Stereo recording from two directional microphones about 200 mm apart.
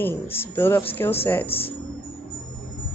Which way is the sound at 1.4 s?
30° left (ahead or behind).